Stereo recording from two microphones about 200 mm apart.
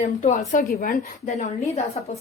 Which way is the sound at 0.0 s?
35° left (ahead or behind).